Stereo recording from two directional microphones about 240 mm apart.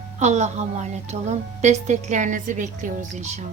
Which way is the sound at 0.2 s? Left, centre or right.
Right.